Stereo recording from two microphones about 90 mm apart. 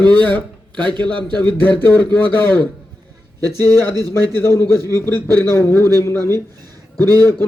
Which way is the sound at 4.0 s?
25° left (ahead or behind).